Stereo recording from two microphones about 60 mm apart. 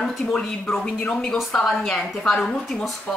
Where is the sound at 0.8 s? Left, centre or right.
Centre.